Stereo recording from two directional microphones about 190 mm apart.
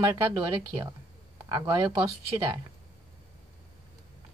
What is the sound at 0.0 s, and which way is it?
Speech, 20° right (ahead or behind).